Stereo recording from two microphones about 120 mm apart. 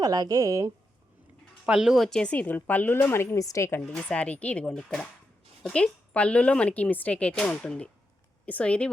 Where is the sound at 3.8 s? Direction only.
5° left (ahead or behind).